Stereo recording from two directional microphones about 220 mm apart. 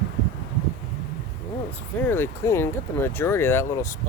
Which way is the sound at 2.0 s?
10° left (ahead or behind).